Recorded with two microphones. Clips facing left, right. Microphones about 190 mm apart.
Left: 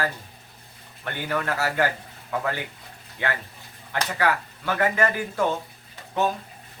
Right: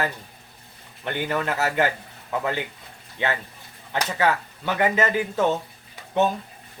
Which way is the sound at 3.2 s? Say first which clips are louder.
Right 2 dB; 20° right (ahead or behind).